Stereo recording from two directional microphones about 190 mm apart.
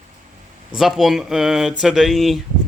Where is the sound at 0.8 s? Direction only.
Centre (ahead or behind).